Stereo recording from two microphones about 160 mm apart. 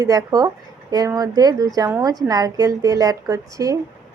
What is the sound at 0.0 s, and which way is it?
Speech, 20° right (ahead or behind).